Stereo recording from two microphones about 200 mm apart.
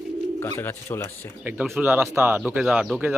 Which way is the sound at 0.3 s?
10° left (ahead or behind).